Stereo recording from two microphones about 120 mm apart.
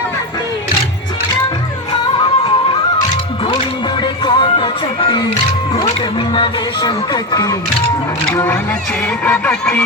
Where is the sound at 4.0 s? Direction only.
40° left (ahead or behind).